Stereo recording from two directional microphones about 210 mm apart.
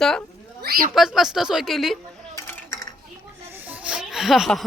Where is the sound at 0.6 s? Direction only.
45° right (ahead or behind).